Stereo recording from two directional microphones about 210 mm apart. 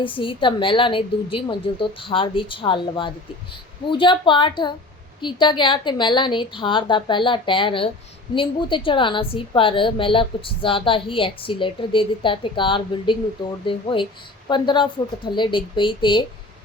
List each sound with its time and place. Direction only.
0.0 s a woman's voice: 25° left (ahead or behind)